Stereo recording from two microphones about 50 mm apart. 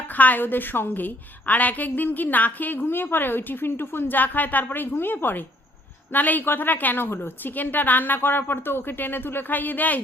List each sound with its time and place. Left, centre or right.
0.1 s a woman's voice: left